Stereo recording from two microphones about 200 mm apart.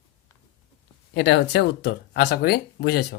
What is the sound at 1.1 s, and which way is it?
Speech, 60° left (ahead or behind).